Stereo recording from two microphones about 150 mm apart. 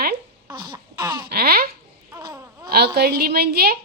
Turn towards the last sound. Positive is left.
turn(degrees=-90)